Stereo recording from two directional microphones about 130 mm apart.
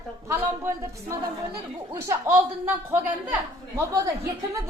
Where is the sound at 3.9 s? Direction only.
25° right (ahead or behind).